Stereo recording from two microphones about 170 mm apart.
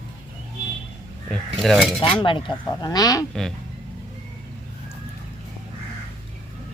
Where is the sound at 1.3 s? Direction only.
Centre (ahead or behind).